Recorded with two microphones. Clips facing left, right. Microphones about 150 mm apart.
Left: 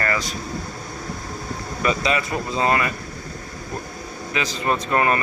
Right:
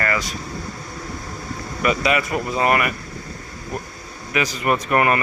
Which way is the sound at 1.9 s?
30° left (ahead or behind).